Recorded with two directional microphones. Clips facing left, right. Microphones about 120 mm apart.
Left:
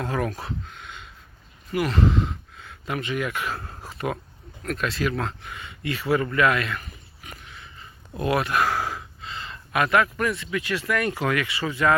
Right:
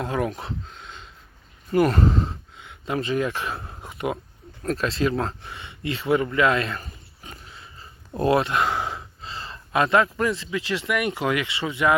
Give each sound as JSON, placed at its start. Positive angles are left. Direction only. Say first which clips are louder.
{"t": 0.0, "sound": "speech", "louder": "right 1 dB", "side_deg": -20}
{"t": 1.7, "sound": "speech", "louder": "right 3 dB", "side_deg": -45}
{"t": 2.6, "sound": "a sound", "louder": "right 4 dB", "side_deg": -20}
{"t": 4.6, "sound": "speech", "louder": "right 3 dB", "side_deg": -30}